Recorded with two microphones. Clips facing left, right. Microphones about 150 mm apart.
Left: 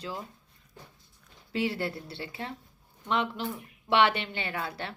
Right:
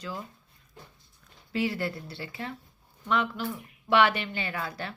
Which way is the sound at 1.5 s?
25° left (ahead or behind).